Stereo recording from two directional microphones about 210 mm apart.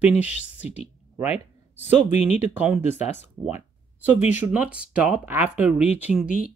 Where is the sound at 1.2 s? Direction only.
30° left (ahead or behind).